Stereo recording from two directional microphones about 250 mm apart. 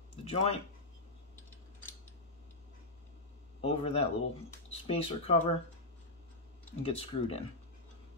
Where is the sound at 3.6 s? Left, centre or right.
Left.